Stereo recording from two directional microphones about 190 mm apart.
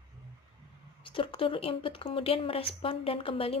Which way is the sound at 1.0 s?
30° left (ahead or behind).